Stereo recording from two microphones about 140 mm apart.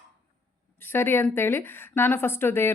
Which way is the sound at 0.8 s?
15° left (ahead or behind).